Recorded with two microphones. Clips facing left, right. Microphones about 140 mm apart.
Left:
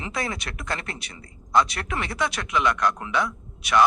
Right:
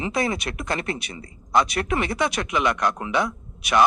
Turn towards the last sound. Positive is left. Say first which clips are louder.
# right 1 dB
turn(degrees=-15)  # may be behind; listen again after turning